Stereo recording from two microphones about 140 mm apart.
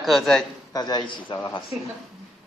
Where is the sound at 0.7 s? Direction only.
30° left (ahead or behind).